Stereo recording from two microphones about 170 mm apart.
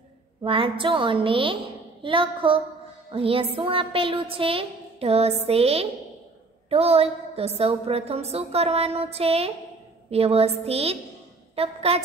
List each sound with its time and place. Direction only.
0.4 s a woman's voice: 30° right (ahead or behind)